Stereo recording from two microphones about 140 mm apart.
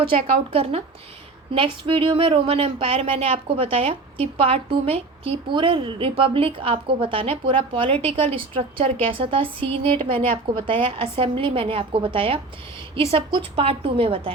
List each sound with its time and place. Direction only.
0.1 s a woman's voice: 45° right (ahead or behind)